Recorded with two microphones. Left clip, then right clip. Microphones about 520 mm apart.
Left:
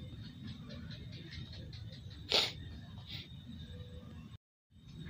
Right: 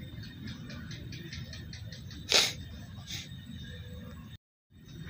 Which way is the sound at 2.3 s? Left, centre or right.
Left.